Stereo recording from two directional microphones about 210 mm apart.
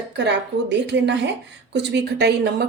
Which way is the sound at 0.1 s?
55° right (ahead or behind).